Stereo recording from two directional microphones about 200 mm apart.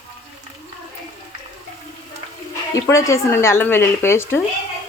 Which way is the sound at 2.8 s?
15° left (ahead or behind).